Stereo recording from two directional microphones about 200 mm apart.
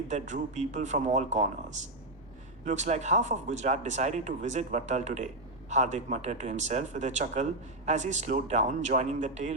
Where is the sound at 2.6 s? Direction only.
35° right (ahead or behind).